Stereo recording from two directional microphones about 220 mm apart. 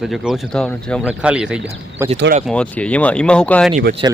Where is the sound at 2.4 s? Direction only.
5° left (ahead or behind).